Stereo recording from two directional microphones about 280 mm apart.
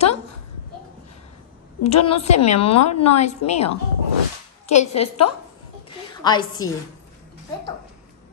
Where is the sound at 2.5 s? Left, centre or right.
Left.